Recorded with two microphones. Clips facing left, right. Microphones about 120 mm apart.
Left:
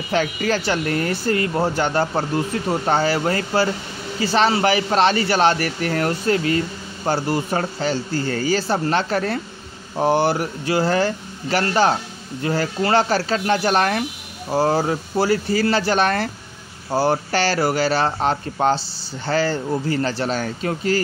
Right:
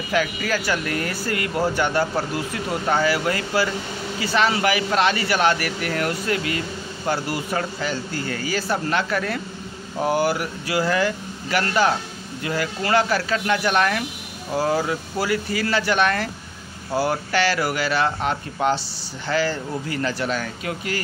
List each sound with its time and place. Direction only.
0.1 s speech: 30° left (ahead or behind)